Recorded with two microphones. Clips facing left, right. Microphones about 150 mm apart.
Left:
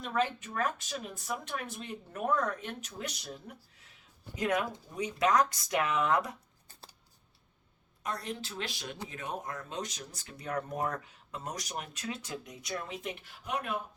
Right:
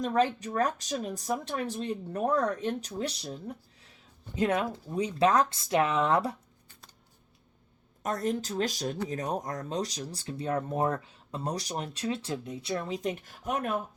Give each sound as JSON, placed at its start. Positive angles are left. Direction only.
{"t": 0.0, "sound": "speech", "side_deg": -35}
{"t": 8.0, "sound": "speech", "side_deg": -45}